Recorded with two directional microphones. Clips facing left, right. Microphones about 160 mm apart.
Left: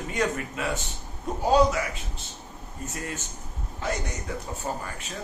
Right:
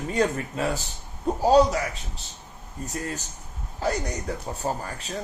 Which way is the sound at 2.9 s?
35° right (ahead or behind).